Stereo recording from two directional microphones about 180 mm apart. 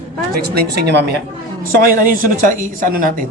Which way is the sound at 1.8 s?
50° right (ahead or behind).